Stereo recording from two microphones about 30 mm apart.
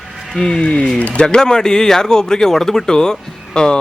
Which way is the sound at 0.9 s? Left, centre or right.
Left.